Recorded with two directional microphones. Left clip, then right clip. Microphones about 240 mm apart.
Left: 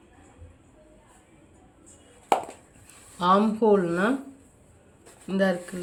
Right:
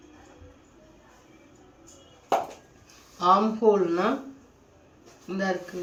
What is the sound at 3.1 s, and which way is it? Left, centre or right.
Speech, left.